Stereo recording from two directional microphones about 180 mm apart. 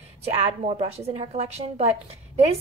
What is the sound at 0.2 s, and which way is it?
A woman's voice, 35° right (ahead or behind).